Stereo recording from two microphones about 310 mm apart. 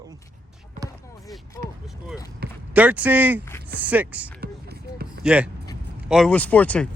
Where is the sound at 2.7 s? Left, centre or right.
Centre.